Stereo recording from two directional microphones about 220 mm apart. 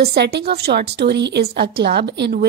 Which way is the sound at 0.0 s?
45° right (ahead or behind).